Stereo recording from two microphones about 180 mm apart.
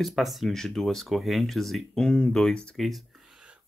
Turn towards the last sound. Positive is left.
turn(degrees=0)  # may be behind; listen again after turning